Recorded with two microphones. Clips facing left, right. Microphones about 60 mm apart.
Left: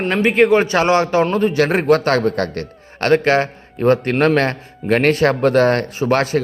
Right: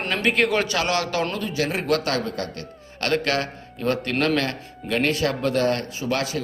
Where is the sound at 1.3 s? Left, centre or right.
Left.